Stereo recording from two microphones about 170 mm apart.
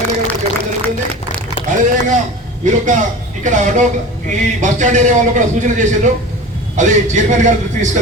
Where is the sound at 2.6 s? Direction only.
45° right (ahead or behind).